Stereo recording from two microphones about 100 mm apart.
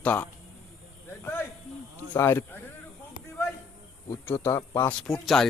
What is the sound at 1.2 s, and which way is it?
Snake, 20° left (ahead or behind).